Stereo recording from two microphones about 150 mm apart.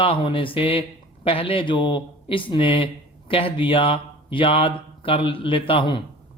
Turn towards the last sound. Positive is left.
turn(degrees=35)  # may be behind; listen again after turning